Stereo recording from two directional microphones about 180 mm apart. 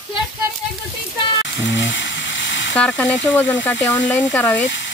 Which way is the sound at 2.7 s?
5° left (ahead or behind).